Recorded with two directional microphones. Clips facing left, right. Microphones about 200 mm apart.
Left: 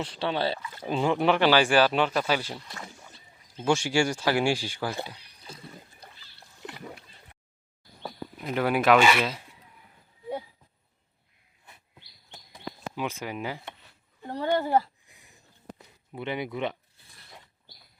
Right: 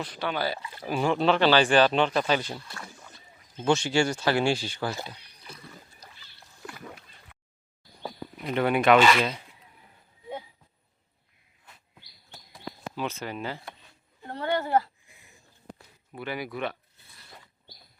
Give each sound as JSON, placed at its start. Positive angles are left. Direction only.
{"t": 0.0, "sound": "speech", "side_deg": 30}
{"t": 2.7, "sound": "speech", "side_deg": 20}
{"t": 5.4, "sound": "splash", "side_deg": 25}
{"t": 8.0, "sound": "speech", "side_deg": 0}
{"t": 13.0, "sound": "speech", "side_deg": 10}
{"t": 14.3, "sound": "a sound", "side_deg": 15}
{"t": 16.1, "sound": "speech", "side_deg": 20}